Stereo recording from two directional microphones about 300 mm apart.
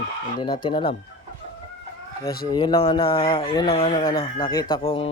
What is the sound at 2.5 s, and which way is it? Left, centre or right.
Speech, centre.